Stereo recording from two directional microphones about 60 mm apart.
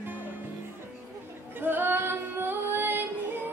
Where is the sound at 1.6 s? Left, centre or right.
Right.